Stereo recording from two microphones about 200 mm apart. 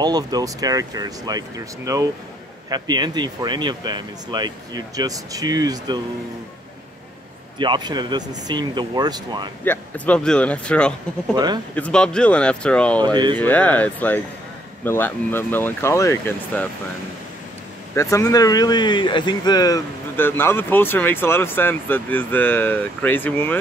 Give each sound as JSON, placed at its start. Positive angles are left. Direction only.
{"t": 0.0, "sound": "speech", "side_deg": -20}
{"t": 7.5, "sound": "speech", "side_deg": -25}
{"t": 9.7, "sound": "speech", "side_deg": 5}
{"t": 11.3, "sound": "speech", "side_deg": -20}
{"t": 11.7, "sound": "speech", "side_deg": 5}
{"t": 13.0, "sound": "speech", "side_deg": -20}
{"t": 13.4, "sound": "speech", "side_deg": 5}
{"t": 17.9, "sound": "speech", "side_deg": 15}